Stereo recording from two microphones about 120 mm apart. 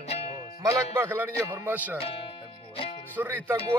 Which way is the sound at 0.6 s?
20° right (ahead or behind).